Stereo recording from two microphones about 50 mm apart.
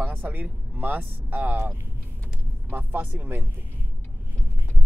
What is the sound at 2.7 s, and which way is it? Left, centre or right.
Speech, right.